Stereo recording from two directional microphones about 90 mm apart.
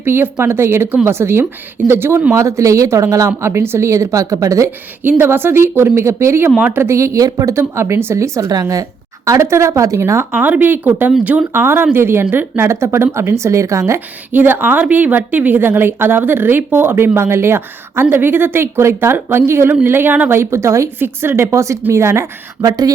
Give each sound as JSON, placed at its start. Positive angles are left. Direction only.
{"t": 0.0, "sound": "a woman's voice", "side_deg": -25}
{"t": 5.0, "sound": "a woman's voice", "side_deg": -25}
{"t": 6.6, "sound": "speech", "side_deg": -15}
{"t": 6.8, "sound": "speech", "side_deg": -35}
{"t": 10.4, "sound": "a woman's voice", "side_deg": -20}
{"t": 14.3, "sound": "a woman's voice", "side_deg": -20}
{"t": 20.4, "sound": "speech", "side_deg": -30}